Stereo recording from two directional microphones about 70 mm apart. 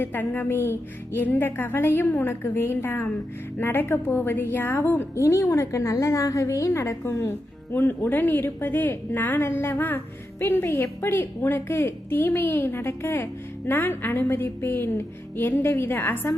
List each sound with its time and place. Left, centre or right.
0.0 s a woman's voice: left
5.1 s a woman's voice: left